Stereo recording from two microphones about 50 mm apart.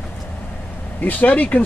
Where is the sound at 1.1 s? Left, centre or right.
Left.